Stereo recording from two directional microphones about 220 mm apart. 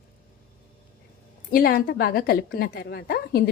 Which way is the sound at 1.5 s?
40° left (ahead or behind).